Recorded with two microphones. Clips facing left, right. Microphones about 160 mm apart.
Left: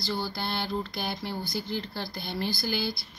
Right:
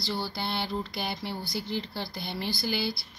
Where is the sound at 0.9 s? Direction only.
5° right (ahead or behind).